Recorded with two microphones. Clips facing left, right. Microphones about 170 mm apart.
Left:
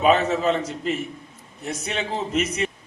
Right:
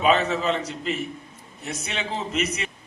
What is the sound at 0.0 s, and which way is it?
A man's voice, 45° left (ahead or behind).